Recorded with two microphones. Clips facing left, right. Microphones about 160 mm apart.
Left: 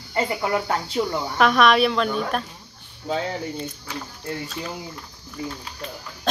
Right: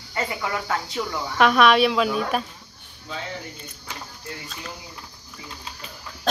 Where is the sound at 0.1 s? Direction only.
30° left (ahead or behind).